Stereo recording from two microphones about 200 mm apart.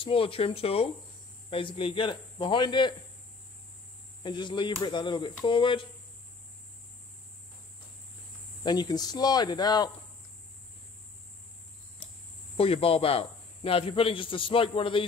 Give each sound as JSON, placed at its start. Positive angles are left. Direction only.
{"t": 0.0, "sound": "speech", "side_deg": 30}
{"t": 4.2, "sound": "speech", "side_deg": 20}
{"t": 8.6, "sound": "speech", "side_deg": 20}
{"t": 12.5, "sound": "speech", "side_deg": 30}